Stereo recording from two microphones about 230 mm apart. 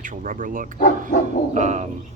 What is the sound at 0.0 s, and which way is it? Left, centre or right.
Speech, right.